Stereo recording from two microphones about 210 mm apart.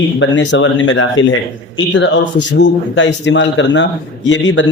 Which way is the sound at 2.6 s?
60° left (ahead or behind).